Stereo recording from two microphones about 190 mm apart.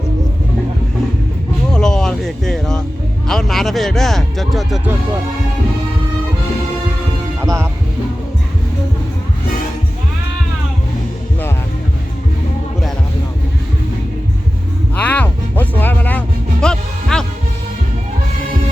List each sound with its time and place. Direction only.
1.7 s a sound: 5° left (ahead or behind)
3.2 s speech: centre (ahead or behind)
7.4 s speech: 15° right (ahead or behind)
14.9 s music: 5° left (ahead or behind)